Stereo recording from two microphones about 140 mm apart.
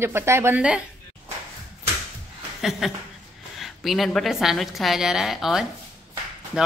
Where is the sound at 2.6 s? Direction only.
Centre (ahead or behind).